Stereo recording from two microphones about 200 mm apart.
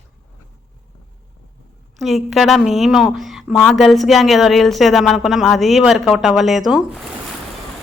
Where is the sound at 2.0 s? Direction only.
Centre (ahead or behind).